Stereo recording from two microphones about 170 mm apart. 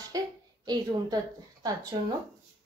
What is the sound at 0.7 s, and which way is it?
Speech, 25° right (ahead or behind).